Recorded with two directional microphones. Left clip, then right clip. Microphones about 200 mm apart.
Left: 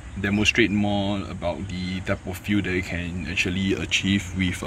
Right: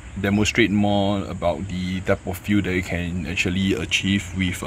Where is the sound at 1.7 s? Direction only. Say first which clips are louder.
Right 2 dB; 70° right (ahead or behind).